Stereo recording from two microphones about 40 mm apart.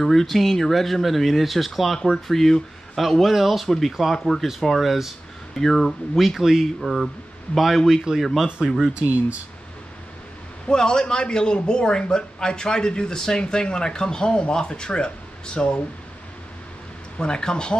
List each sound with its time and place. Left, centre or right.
0.0 s speech: centre
3.6 s speech: centre
5.6 s speech: centre
8.9 s speech: right
10.7 s a man's voice: centre
17.2 s a man's voice: centre